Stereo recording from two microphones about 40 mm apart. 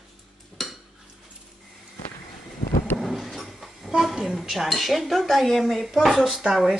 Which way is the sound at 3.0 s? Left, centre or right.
Centre.